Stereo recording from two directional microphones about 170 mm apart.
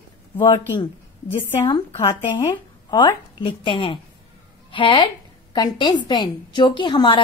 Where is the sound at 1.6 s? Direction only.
30° left (ahead or behind).